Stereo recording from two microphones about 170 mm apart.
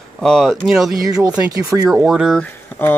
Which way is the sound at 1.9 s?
Centre (ahead or behind).